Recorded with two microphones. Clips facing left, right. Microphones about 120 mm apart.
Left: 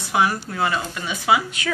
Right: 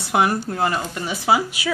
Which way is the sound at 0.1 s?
55° right (ahead or behind).